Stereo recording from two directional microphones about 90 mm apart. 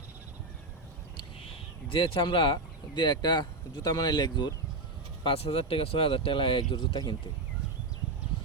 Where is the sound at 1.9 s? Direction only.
75° left (ahead or behind); by 4.5 s 60° left (ahead or behind).